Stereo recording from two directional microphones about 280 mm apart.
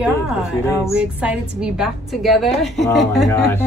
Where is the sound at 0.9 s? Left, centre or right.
Centre.